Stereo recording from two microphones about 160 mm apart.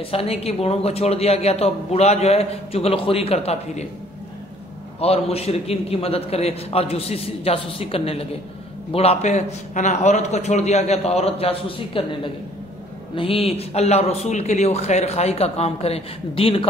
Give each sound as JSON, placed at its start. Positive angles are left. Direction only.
{"t": 0.0, "sound": "speech", "side_deg": 35}
{"t": 5.0, "sound": "a man's voice", "side_deg": 40}